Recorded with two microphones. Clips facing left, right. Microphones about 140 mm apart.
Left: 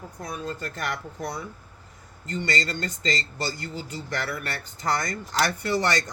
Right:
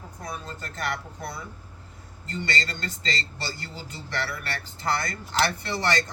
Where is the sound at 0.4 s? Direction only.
50° left (ahead or behind).